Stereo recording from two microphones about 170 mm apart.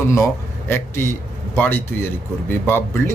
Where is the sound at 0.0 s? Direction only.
15° left (ahead or behind).